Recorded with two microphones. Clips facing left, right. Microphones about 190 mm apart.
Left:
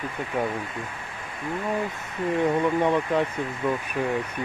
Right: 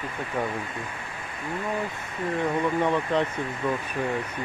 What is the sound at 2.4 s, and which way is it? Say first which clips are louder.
Speech: left 3 dB; 15° left (ahead or behind).